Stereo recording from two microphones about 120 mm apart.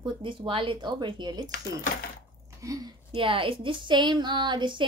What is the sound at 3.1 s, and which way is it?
Speech, 50° right (ahead or behind).